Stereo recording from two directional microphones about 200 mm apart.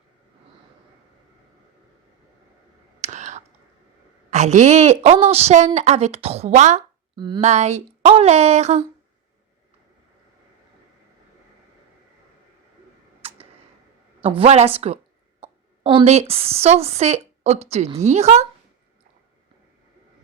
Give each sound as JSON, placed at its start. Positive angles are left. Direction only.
{"t": 3.0, "sound": "clicking", "side_deg": -35}
{"t": 4.3, "sound": "speech", "side_deg": -35}
{"t": 7.2, "sound": "speech", "side_deg": -20}
{"t": 7.4, "sound": "speech", "side_deg": -35}
{"t": 13.2, "sound": "tick", "side_deg": -30}
{"t": 14.2, "sound": "a woman's voice", "side_deg": -30}